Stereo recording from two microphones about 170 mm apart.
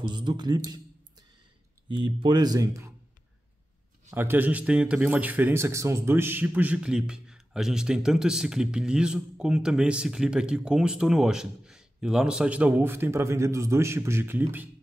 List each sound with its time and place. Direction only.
0.0 s speech: 25° right (ahead or behind)
1.9 s speech: 30° right (ahead or behind)
4.1 s speech: 10° right (ahead or behind)